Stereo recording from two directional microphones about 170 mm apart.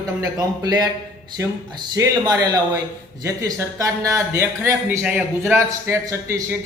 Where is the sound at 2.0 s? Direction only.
20° right (ahead or behind).